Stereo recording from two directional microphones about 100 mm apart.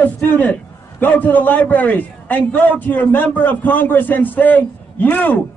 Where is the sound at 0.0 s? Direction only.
15° left (ahead or behind).